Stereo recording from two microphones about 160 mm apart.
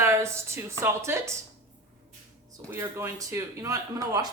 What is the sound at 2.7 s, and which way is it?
A man's voice, 15° right (ahead or behind).